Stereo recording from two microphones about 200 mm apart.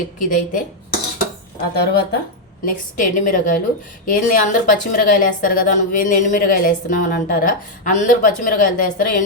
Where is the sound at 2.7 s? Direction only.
40° left (ahead or behind).